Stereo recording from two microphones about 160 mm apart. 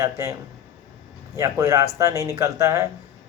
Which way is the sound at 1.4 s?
20° right (ahead or behind).